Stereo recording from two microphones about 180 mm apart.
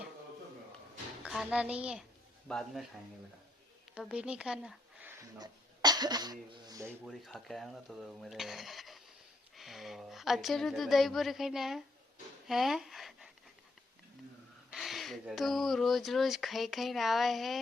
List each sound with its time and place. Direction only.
1.2 s a child's voice: 5° right (ahead or behind)
3.9 s a woman's voice: 5° right (ahead or behind)
5.4 s speech: 20° right (ahead or behind)
7.0 s speech: centre (ahead or behind)
12.5 s a sound: centre (ahead or behind)
14.7 s speech: centre (ahead or behind)